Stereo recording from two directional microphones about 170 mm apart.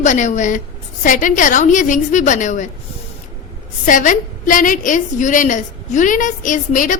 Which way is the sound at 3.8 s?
50° left (ahead or behind).